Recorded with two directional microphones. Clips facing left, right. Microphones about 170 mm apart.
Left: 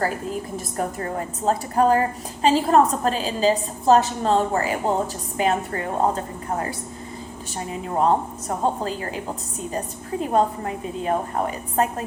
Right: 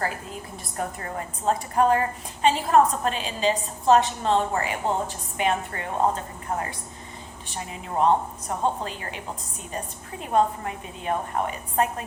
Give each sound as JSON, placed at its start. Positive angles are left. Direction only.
{"t": 0.5, "sound": "a woman's voice", "side_deg": 35}